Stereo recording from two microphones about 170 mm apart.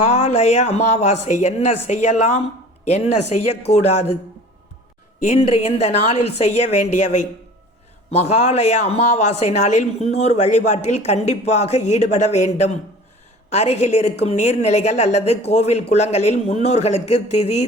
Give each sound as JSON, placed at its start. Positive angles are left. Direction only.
{"t": 0.1, "sound": "speech", "side_deg": 40}
{"t": 5.3, "sound": "speech", "side_deg": 40}